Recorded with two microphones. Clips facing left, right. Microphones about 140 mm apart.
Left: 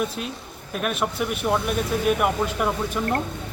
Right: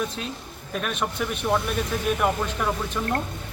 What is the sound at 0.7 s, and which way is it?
A man's voice, 5° left (ahead or behind).